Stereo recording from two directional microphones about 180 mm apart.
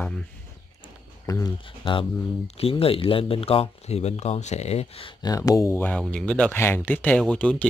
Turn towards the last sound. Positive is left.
turn(degrees=5)  # may be behind; listen again after turning